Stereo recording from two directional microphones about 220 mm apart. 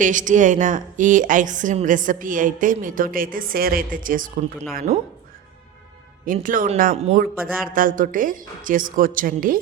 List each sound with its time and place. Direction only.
0.0 s a woman's voice: 35° right (ahead or behind)
6.2 s a woman's voice: 40° right (ahead or behind)